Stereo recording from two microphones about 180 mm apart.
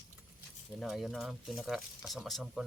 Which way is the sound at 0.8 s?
Centre (ahead or behind).